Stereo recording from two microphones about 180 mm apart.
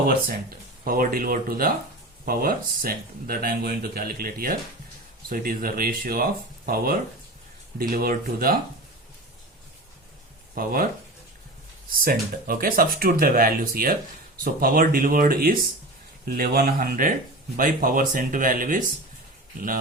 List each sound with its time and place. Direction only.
0.9 s speech: 55° right (ahead or behind)
10.5 s speech: 55° right (ahead or behind)
11.9 s speech: 55° right (ahead or behind)